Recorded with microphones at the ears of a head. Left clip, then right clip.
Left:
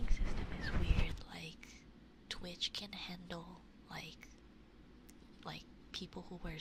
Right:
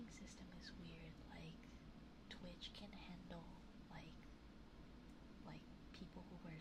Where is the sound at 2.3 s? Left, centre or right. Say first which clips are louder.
Left 15 dB; left.